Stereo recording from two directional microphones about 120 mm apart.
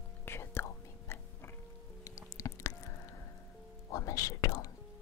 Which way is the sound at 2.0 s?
25° left (ahead or behind).